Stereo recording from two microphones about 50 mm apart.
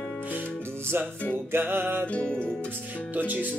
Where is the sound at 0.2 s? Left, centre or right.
Right.